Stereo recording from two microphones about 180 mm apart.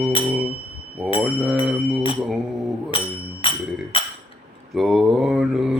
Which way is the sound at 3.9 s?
30° left (ahead or behind).